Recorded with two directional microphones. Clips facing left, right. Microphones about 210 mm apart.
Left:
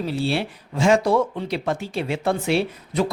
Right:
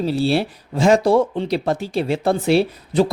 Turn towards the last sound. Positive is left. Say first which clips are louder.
# right 5 dB
turn(degrees=-35)  # may be behind; listen again after turning